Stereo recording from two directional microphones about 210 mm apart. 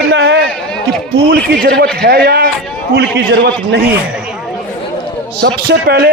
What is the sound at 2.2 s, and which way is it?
A man's voice, 50° right (ahead or behind).